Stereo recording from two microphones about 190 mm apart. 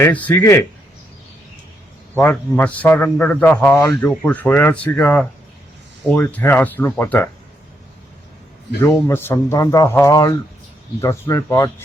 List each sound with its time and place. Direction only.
0.0 s a man's voice: 10° left (ahead or behind)
2.1 s a man's voice: 10° left (ahead or behind)
8.8 s a man's voice: 15° left (ahead or behind)